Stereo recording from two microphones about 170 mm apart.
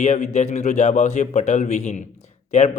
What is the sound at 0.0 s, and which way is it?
Speech, 45° left (ahead or behind).